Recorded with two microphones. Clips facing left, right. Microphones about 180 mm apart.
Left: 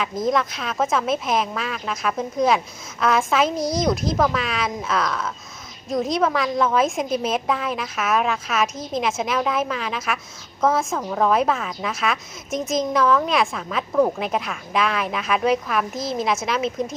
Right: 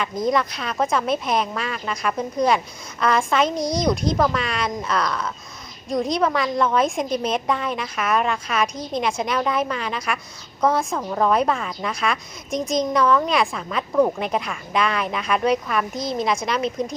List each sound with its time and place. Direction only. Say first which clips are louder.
0.0 s a woman's voice: even; centre (ahead or behind)